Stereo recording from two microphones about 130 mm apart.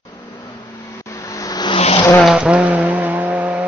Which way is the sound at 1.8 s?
50° left (ahead or behind).